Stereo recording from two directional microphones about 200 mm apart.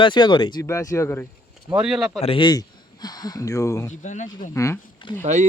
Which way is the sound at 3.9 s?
35° left (ahead or behind).